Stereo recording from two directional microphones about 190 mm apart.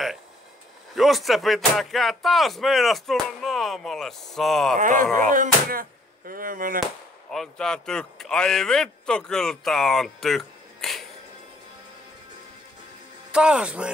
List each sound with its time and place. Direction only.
0.9 s speech: centre (ahead or behind)
4.7 s a sound: 40° right (ahead or behind)
5.3 s speech: 45° right (ahead or behind)
7.2 s speech: 5° left (ahead or behind)
13.3 s speech: 5° right (ahead or behind)